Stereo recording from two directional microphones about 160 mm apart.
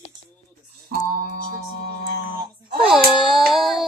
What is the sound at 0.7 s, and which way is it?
Music, 65° right (ahead or behind).